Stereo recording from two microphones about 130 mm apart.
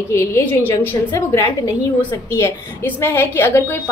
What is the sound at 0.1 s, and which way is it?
A woman's voice, 20° left (ahead or behind).